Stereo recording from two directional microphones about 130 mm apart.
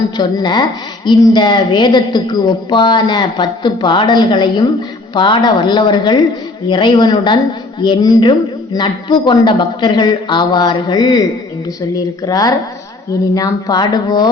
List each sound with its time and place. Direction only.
0.2 s a woman's voice: 35° left (ahead or behind)